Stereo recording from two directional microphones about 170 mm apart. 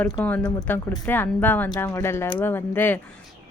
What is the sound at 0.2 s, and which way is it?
A woman's voice, 10° left (ahead or behind).